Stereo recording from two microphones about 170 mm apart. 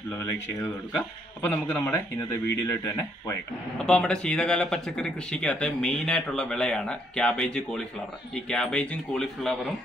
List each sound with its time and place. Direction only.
1.4 s speech: 10° left (ahead or behind)
3.8 s speech: 5° left (ahead or behind)